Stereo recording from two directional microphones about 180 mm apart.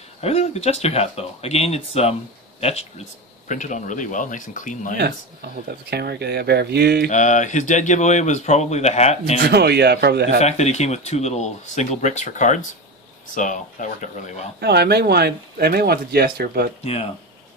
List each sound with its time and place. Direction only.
0.2 s speech: 35° left (ahead or behind)
4.9 s speech: 65° right (ahead or behind)
7.1 s speech: 45° left (ahead or behind)
9.5 s a man's voice: 65° right (ahead or behind)
10.4 s speech: 40° left (ahead or behind)
14.6 s speech: 65° right (ahead or behind)
16.8 s speech: 35° left (ahead or behind)